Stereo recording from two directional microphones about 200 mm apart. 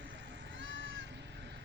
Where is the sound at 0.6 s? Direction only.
65° right (ahead or behind).